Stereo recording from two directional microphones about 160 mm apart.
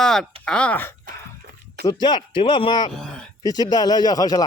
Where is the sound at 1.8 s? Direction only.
25° left (ahead or behind).